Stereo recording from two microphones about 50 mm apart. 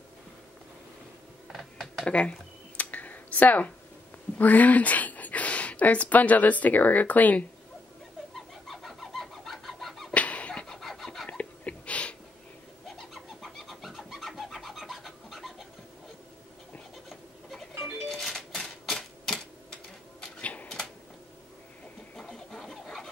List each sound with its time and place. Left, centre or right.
1.5 s typing: centre
2.0 s speech: left
2.8 s a sound: left
4.4 s speech: left
8.6 s chicken: centre
10.1 s a sound: left
10.5 s vehicle: centre
11.2 s a sound: left
12.8 s bird: centre
18.0 s typewriter: centre
20.3 s typewriter: left
22.1 s a sound: centre
22.7 s chicken: centre